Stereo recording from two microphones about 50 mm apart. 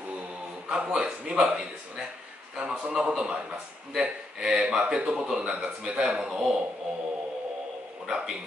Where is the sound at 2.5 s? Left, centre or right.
Centre.